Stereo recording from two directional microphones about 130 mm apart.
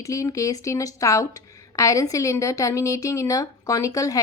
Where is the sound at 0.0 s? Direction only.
25° left (ahead or behind).